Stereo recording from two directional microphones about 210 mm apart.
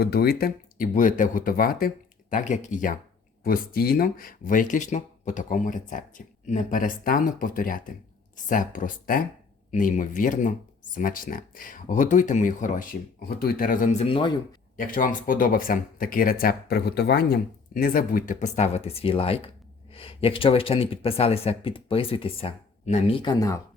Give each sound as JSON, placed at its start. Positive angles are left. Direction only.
{"t": 0.0, "sound": "speech", "side_deg": 45}
{"t": 14.8, "sound": "speech", "side_deg": 40}